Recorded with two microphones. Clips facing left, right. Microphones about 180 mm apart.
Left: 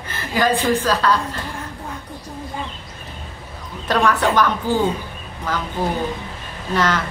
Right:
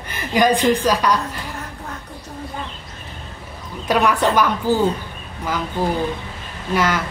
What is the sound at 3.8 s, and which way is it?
A woman's voice, 10° right (ahead or behind).